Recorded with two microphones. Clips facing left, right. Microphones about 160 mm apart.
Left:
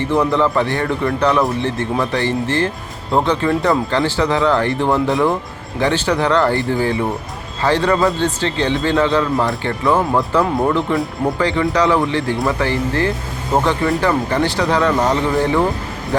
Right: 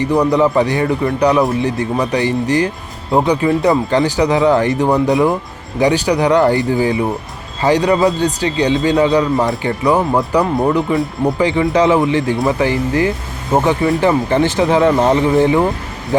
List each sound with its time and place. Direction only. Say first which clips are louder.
0.1 s a man's voice: right 3 dB; 15° right (ahead or behind)